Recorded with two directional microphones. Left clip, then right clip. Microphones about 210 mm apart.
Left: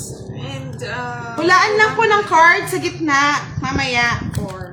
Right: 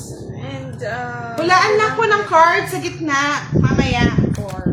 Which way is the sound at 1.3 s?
30° left (ahead or behind).